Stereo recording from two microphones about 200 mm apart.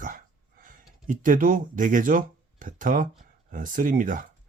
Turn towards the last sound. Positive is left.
turn(degrees=-40)  # may be behind; listen again after turning